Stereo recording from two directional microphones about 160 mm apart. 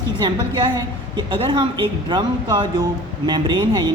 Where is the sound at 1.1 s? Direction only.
30° right (ahead or behind).